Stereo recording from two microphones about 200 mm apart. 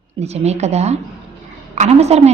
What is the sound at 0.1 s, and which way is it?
Speech, 30° right (ahead or behind).